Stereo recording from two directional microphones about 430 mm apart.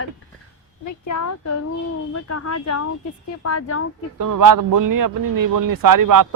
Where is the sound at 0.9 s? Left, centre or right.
Left.